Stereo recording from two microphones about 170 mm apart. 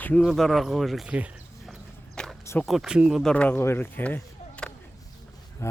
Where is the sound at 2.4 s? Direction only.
15° left (ahead or behind).